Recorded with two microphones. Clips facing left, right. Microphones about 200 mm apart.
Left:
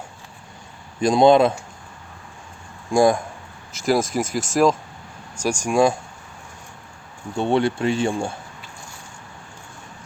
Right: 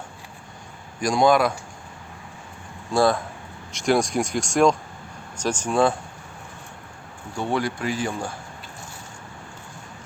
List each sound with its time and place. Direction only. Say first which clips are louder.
1.0 s speech: left 5 dB; 25° left (ahead or behind)
2.9 s speech: left 3 dB; 15° left (ahead or behind)
3.7 s speech: left 1 dB; 5° left (ahead or behind)
7.3 s speech: left 5 dB; 25° left (ahead or behind)